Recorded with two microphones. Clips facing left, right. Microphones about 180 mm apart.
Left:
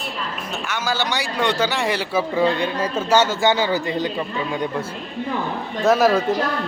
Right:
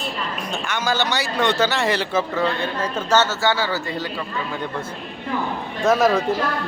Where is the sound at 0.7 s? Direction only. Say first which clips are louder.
Right 1 dB; 10° left (ahead or behind).